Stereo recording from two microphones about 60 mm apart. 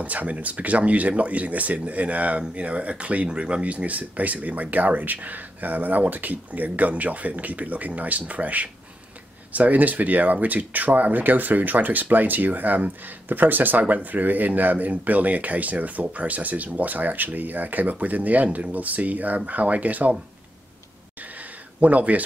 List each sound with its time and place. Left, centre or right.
0.0 s speech: right
21.7 s speech: right